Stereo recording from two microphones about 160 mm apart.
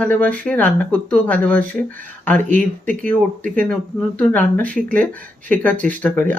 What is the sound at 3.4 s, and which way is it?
Speech, 55° right (ahead or behind).